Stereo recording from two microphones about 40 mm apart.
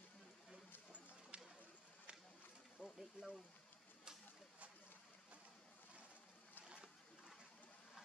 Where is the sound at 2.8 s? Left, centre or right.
Left.